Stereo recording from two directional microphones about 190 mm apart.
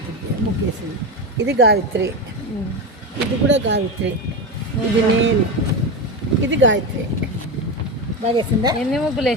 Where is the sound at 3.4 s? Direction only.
70° right (ahead or behind).